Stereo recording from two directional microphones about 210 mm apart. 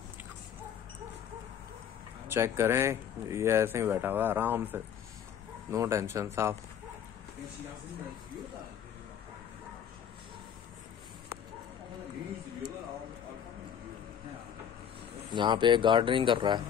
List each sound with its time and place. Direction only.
2.2 s speech: 15° right (ahead or behind)
15.3 s speech: 20° right (ahead or behind)